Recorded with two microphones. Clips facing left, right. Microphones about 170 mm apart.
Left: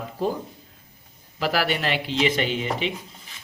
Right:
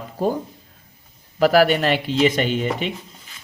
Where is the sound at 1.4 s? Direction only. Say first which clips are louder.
Right 9 dB; 45° right (ahead or behind).